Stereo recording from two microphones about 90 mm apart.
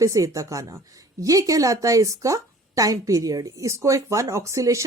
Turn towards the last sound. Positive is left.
turn(degrees=-35)  # may be behind; listen again after turning